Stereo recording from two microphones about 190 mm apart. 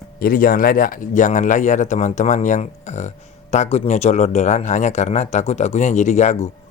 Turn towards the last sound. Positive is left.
turn(degrees=40)  # may be behind; listen again after turning